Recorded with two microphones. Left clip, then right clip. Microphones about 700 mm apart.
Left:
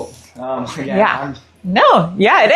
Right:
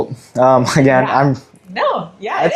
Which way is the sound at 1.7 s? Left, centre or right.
Left.